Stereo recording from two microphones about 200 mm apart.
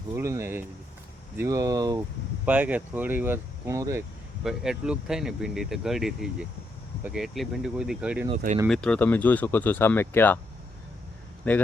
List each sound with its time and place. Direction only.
0.1 s speech: 15° right (ahead or behind)
2.5 s speech: 5° right (ahead or behind)
4.4 s speech: 5° right (ahead or behind)
11.5 s speech: 10° left (ahead or behind)